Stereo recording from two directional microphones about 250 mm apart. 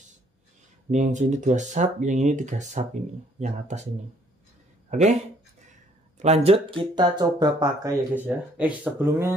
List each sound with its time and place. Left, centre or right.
0.9 s speech: right
4.9 s speech: right; by 9.3 s centre